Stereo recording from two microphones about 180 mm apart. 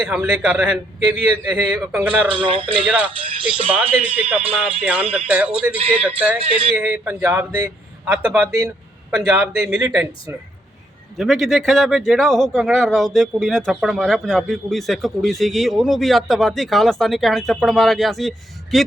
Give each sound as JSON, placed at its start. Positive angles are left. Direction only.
{"t": 0.1, "sound": "a man's voice", "side_deg": -10}
{"t": 2.3, "sound": "speech", "side_deg": -30}
{"t": 2.8, "sound": "a man's voice", "side_deg": -5}
{"t": 3.2, "sound": "speech", "side_deg": -30}
{"t": 3.8, "sound": "a man's voice", "side_deg": -10}
{"t": 5.7, "sound": "speech", "side_deg": -30}
{"t": 6.0, "sound": "a man's voice", "side_deg": -5}
{"t": 11.2, "sound": "speech", "side_deg": 0}